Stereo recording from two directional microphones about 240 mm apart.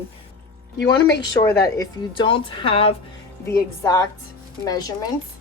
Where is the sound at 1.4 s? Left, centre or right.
Centre.